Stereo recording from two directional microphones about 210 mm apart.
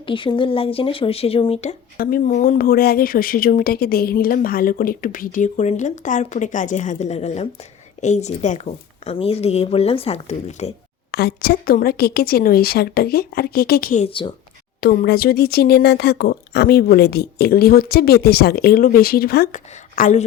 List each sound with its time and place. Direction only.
0.0 s a woman's voice: 25° left (ahead or behind)
2.0 s a woman's voice: 45° left (ahead or behind)
11.1 s speech: 50° left (ahead or behind)
14.0 s a woman's voice: 25° left (ahead or behind)
14.8 s speech: 45° left (ahead or behind)